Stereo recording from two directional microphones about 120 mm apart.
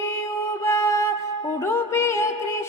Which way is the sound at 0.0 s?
20° left (ahead or behind).